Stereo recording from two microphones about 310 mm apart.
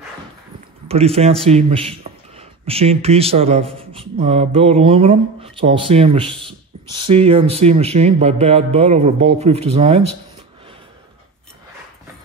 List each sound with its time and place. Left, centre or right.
0.8 s a man's voice: centre